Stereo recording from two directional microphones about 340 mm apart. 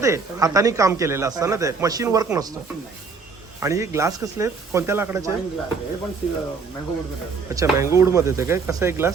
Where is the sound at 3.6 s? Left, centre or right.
Centre.